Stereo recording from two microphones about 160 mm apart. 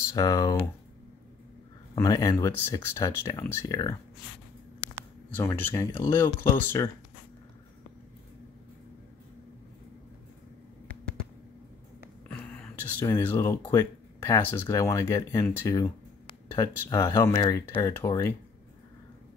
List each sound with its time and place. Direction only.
0.1 s speech: 25° left (ahead or behind)
2.0 s speech: 20° left (ahead or behind)
5.3 s speech: 15° left (ahead or behind)
12.3 s whispering: 5° left (ahead or behind)
13.0 s speech: 15° left (ahead or behind)